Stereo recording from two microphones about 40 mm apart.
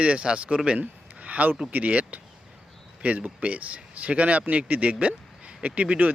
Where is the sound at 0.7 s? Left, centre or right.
Right.